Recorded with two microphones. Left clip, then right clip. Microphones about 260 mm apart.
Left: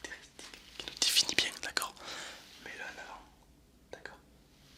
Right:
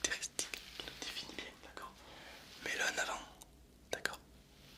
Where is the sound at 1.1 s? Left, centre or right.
Left.